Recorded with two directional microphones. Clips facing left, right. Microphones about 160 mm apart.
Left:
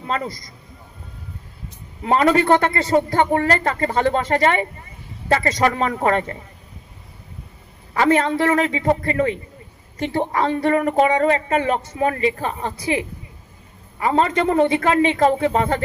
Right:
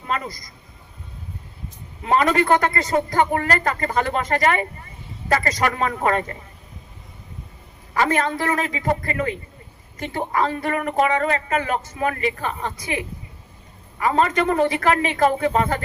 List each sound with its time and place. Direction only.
0.1 s a man's voice: 30° left (ahead or behind)
2.0 s a man's voice: 25° left (ahead or behind)
7.9 s a man's voice: 30° left (ahead or behind)